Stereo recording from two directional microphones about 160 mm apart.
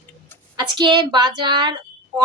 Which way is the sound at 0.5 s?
30° right (ahead or behind).